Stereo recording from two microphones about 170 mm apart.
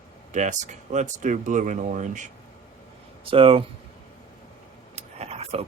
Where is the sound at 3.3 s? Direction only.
30° right (ahead or behind).